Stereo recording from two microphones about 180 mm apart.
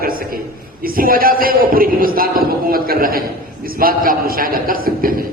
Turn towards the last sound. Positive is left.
turn(degrees=-55)  # may be behind; listen again after turning